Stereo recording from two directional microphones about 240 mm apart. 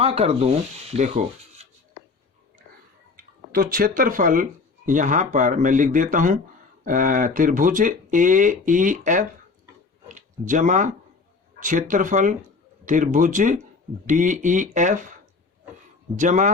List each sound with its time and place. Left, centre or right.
0.0 s speech: right
3.5 s speech: right
16.1 s speech: right